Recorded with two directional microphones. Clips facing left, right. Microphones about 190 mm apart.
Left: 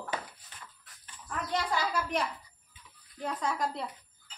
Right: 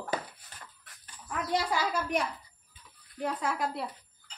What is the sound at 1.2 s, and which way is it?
A woman's voice, 10° right (ahead or behind).